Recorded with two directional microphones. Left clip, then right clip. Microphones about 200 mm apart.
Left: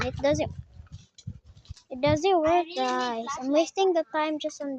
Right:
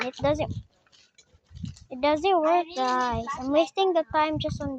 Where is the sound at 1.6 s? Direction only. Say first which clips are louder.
Right 12 dB; 40° right (ahead or behind).